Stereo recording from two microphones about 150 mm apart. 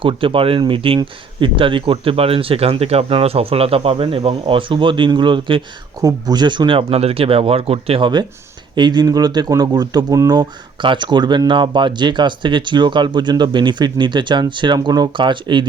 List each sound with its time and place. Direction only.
0.0 s speech: 35° right (ahead or behind)